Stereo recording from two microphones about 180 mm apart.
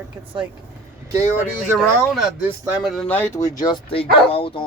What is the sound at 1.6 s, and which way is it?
Speech, centre (ahead or behind).